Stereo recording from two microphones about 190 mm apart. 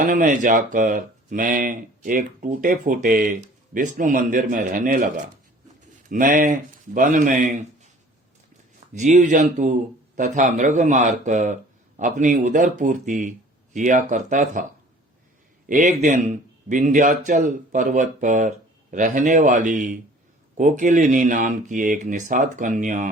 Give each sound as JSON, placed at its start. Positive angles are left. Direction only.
{"t": 0.0, "sound": "speech", "side_deg": -45}
{"t": 9.0, "sound": "speech", "side_deg": -40}
{"t": 15.7, "sound": "speech", "side_deg": -40}